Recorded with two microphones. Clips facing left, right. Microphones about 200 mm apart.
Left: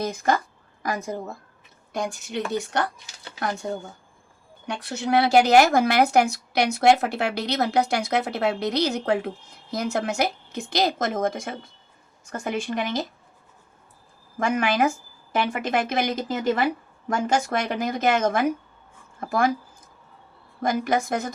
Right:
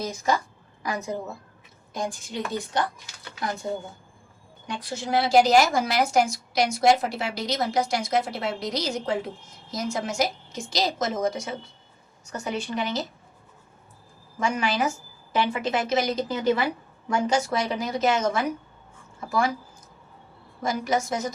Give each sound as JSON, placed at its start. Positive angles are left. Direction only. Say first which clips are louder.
{"t": 0.0, "sound": "speech", "louder": "left 2 dB", "side_deg": 55}
{"t": 1.9, "sound": "speech", "louder": "left 2 dB", "side_deg": 65}
{"t": 4.6, "sound": "a woman's voice", "louder": "left 3 dB", "side_deg": 65}
{"t": 14.3, "sound": "a woman's voice", "louder": "left 3 dB", "side_deg": 55}
{"t": 20.6, "sound": "speech", "louder": "left 2 dB", "side_deg": 55}